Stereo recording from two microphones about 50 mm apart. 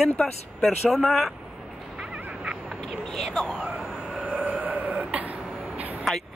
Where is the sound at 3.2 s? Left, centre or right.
Centre.